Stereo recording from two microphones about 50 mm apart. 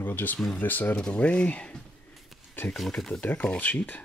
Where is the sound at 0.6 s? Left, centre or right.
Left.